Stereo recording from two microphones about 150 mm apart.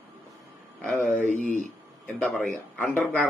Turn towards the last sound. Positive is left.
turn(degrees=10)  # may be behind; listen again after turning